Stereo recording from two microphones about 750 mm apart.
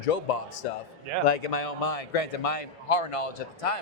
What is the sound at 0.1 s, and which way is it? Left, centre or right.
A man's voice, left.